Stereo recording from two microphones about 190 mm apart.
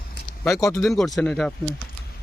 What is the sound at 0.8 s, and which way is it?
Speech, centre (ahead or behind).